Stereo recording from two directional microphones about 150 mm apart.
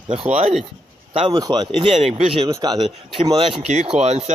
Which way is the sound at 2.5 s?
25° right (ahead or behind).